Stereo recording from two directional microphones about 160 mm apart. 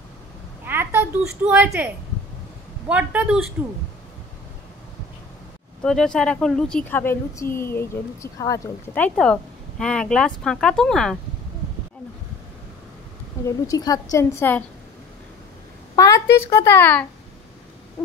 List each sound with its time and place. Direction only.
0.7 s a child's voice: 15° right (ahead or behind)
2.9 s a woman's voice: 10° right (ahead or behind)
5.8 s a woman's voice: 5° left (ahead or behind)
13.4 s a sound: 15° left (ahead or behind)
13.7 s a woman's voice: 25° left (ahead or behind)
16.0 s a woman's voice: 20° left (ahead or behind)